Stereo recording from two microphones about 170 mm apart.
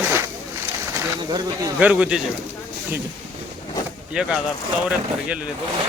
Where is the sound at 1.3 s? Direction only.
25° right (ahead or behind).